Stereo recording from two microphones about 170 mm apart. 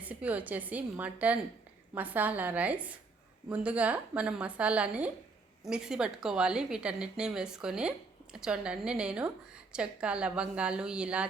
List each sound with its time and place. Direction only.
0.0 s a woman's voice: 10° right (ahead or behind)